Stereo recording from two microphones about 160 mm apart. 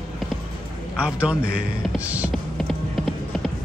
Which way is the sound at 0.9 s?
5° right (ahead or behind).